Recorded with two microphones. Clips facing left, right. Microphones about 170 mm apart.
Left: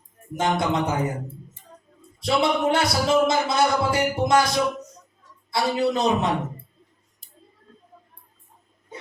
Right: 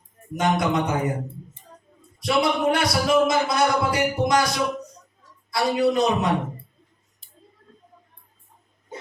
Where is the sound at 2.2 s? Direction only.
25° left (ahead or behind).